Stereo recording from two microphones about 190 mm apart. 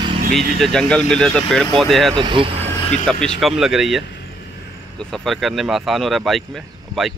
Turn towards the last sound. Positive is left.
turn(degrees=0)  # may be behind; listen again after turning